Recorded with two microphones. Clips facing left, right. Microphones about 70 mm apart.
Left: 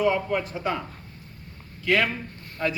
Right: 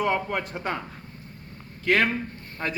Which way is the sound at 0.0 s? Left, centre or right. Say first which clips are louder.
Left 2 dB; right.